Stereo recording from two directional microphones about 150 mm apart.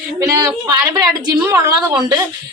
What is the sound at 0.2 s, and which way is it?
Speech, 20° right (ahead or behind).